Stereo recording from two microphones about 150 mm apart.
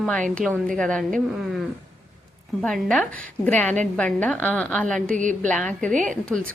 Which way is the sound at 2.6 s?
5° left (ahead or behind).